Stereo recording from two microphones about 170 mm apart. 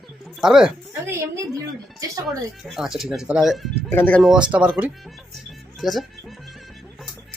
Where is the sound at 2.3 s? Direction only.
Centre (ahead or behind).